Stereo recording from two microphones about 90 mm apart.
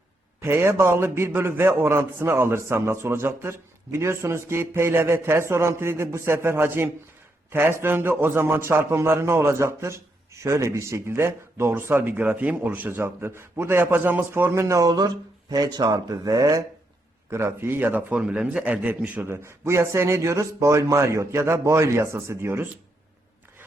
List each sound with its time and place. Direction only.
0.4 s a man's voice: 25° right (ahead or behind)
17.3 s a man's voice: 25° right (ahead or behind)